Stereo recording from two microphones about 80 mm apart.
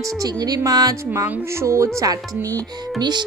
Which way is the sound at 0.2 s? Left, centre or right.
Right.